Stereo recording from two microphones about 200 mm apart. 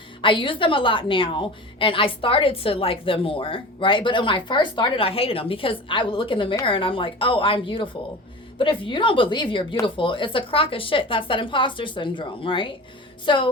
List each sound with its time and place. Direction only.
0.2 s a woman's voice: 25° left (ahead or behind)